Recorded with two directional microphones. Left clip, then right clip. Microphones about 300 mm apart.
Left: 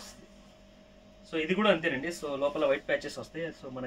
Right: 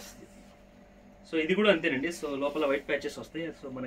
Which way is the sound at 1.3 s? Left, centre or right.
Centre.